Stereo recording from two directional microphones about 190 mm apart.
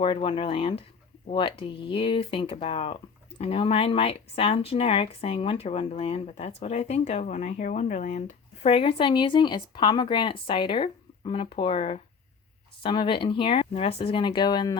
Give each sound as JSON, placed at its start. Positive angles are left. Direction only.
{"t": 0.0, "sound": "speech", "side_deg": 25}
{"t": 8.6, "sound": "speech", "side_deg": 30}